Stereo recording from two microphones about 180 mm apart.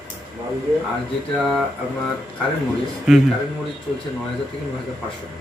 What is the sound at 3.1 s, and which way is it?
Speech, 5° right (ahead or behind).